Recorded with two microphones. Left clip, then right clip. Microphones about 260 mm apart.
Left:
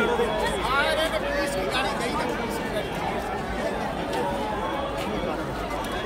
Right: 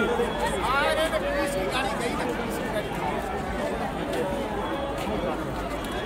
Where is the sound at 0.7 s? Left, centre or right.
Right.